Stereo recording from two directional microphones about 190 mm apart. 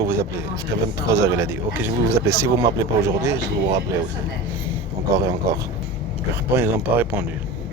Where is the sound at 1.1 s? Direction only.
15° right (ahead or behind).